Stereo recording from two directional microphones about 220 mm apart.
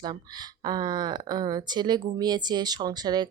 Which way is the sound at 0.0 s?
20° right (ahead or behind).